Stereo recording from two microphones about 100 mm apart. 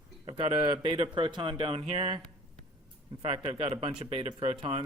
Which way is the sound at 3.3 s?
65° right (ahead or behind).